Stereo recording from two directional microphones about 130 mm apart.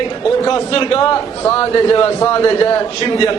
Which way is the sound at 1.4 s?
20° left (ahead or behind).